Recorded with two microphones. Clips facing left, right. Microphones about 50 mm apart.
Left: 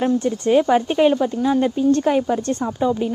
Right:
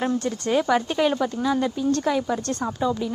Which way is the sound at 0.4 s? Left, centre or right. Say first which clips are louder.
Left 5 dB; left.